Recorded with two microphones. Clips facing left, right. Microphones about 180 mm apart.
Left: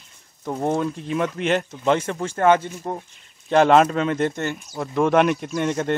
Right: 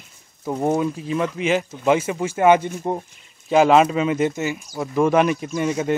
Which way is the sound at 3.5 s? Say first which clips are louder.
Right 1 dB; 5° right (ahead or behind).